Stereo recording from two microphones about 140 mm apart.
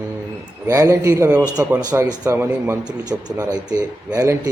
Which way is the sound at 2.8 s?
30° right (ahead or behind).